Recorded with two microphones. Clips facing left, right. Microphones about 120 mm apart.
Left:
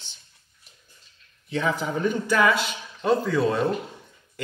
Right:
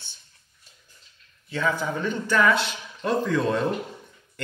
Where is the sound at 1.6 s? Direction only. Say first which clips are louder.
Left 1 dB; 20° left (ahead or behind).